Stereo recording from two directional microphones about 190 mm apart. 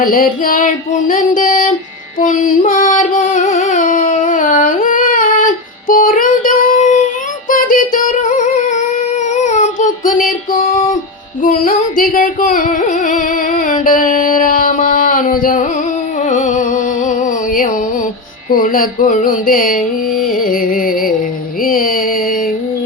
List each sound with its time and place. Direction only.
0.0 s music: 50° left (ahead or behind)
7.5 s female singing: 45° left (ahead or behind)
9.3 s child singing: 40° left (ahead or behind)
11.4 s singing: 45° left (ahead or behind)
16.2 s music: 40° left (ahead or behind)